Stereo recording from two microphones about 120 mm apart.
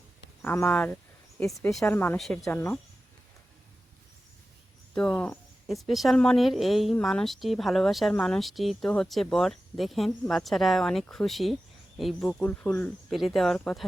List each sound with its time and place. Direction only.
0.4 s speech: 20° left (ahead or behind)
0.7 s speech: 10° left (ahead or behind)
4.9 s speech: 5° left (ahead or behind)
13.1 s speech: centre (ahead or behind)